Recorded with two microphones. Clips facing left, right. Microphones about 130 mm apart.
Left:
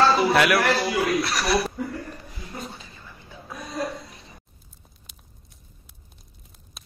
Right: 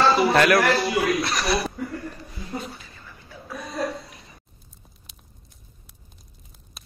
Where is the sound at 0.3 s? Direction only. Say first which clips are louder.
Right 2 dB; 5° left (ahead or behind).